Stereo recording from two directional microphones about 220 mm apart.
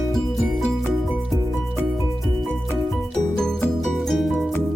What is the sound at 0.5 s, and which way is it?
Music, centre (ahead or behind).